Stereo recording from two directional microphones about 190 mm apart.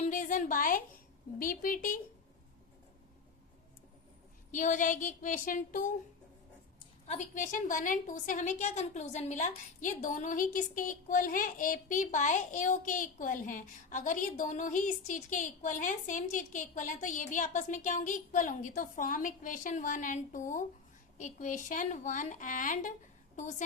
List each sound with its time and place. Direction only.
0.1 s a woman's voice: 45° left (ahead or behind)
4.5 s a woman's voice: 40° left (ahead or behind)
7.0 s a woman's voice: 40° left (ahead or behind)